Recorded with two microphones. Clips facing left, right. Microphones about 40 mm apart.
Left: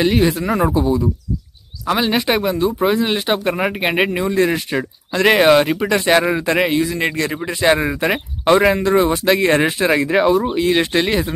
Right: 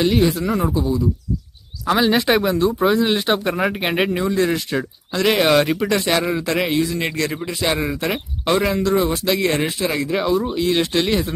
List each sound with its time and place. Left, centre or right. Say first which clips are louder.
0.0 s speech: left 1 dB; centre
0.5 s speech: left 4 dB; left
1.9 s speech: right 1 dB; centre
5.5 s speech: left 3 dB; centre; by 10.1 s left
10.1 s speech: left 4 dB; left